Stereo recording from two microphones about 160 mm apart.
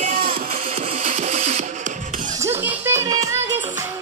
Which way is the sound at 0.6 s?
40° right (ahead or behind).